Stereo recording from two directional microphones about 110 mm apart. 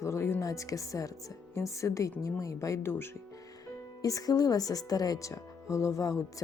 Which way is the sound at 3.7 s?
30° left (ahead or behind).